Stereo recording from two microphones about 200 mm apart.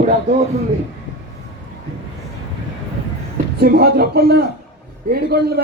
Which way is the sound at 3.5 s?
50° right (ahead or behind).